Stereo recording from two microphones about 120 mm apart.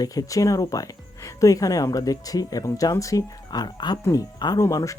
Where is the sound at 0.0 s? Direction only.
30° left (ahead or behind).